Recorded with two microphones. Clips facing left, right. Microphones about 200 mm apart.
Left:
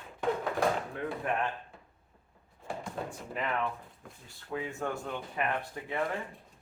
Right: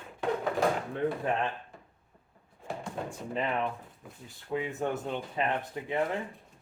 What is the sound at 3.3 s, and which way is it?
Speech, 25° right (ahead or behind).